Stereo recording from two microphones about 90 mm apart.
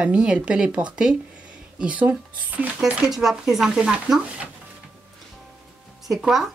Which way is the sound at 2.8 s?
5° right (ahead or behind).